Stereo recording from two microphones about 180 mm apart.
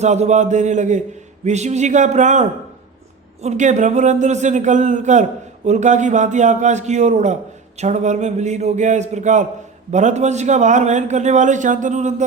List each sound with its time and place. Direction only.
0.0 s a man's voice: 40° right (ahead or behind)